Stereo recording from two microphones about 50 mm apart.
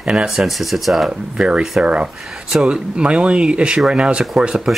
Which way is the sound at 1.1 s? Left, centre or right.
Centre.